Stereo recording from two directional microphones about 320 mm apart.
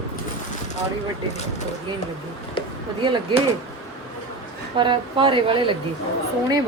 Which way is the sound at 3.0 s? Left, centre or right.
Centre.